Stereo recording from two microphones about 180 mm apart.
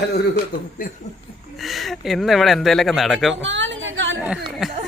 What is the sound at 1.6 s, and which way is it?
Speech, centre (ahead or behind).